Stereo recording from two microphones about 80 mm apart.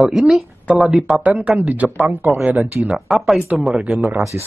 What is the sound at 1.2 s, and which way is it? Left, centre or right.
Speech, centre.